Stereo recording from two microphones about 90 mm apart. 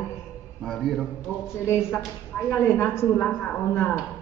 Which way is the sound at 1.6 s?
25° left (ahead or behind).